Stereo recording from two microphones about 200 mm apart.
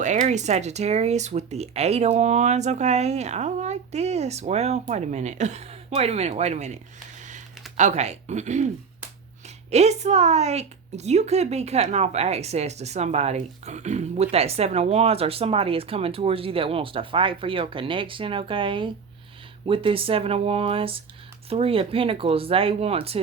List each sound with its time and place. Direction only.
0.0 s a woman's voice: 35° right (ahead or behind)
7.8 s a woman's voice: 35° right (ahead or behind)
9.6 s a woman's voice: 35° right (ahead or behind)